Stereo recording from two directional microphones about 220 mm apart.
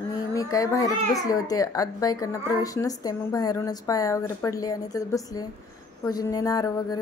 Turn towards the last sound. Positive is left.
turn(degrees=15)  # may be behind; listen again after turning